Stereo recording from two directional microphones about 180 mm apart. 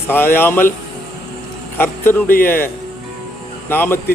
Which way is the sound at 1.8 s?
10° left (ahead or behind).